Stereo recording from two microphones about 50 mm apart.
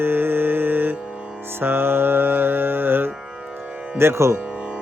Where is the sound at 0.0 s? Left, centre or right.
Right.